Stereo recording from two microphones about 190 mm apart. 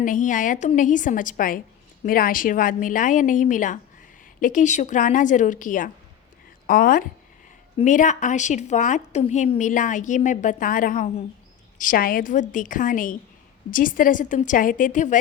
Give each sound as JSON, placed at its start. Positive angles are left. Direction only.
{"t": 0.0, "sound": "a woman's voice", "side_deg": 45}